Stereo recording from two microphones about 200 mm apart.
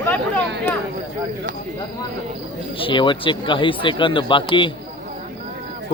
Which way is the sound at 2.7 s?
25° left (ahead or behind).